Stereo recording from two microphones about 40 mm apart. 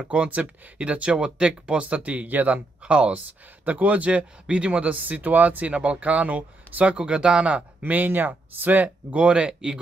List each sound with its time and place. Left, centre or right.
0.0 s speech: right
2.0 s speech: right
2.8 s speech: right
3.6 s speech: right
4.9 s speech: right
7.8 s speech: right
8.8 s speech: right